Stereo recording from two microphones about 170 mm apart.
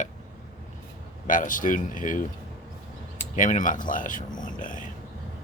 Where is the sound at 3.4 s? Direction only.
50° left (ahead or behind).